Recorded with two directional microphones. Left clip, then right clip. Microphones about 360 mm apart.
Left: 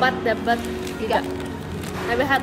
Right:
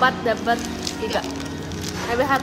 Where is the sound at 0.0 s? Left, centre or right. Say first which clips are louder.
Right 1 dB; centre.